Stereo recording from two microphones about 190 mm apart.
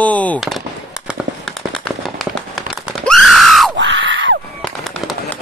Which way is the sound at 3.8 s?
75° right (ahead or behind).